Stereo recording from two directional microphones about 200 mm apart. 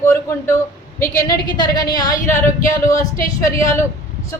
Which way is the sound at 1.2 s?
20° left (ahead or behind).